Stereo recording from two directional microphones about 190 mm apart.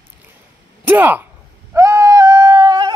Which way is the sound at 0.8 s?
10° right (ahead or behind).